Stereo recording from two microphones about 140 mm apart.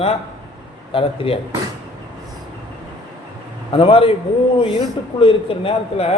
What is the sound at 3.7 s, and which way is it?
Speech, 40° left (ahead or behind).